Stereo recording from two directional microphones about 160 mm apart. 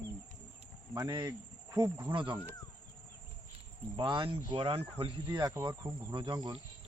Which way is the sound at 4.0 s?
30° right (ahead or behind).